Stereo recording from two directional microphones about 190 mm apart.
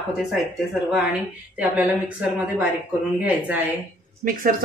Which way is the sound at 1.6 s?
5° right (ahead or behind).